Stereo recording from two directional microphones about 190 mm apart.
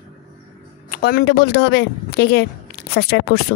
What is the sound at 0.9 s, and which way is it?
Speech, 50° left (ahead or behind).